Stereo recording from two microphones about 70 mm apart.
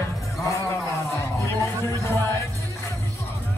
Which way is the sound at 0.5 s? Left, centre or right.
Left.